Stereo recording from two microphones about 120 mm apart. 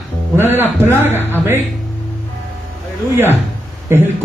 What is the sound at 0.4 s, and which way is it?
Speech, 20° right (ahead or behind).